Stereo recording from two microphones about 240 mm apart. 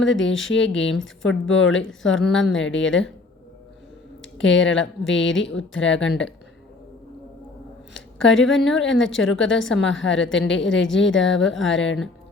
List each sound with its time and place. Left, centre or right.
0.0 s a woman's voice: left
4.2 s a woman's voice: left
7.9 s a sound: left
8.7 s a woman's voice: left